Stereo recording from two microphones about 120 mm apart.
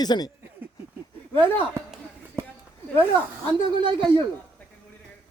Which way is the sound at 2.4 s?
25° right (ahead or behind).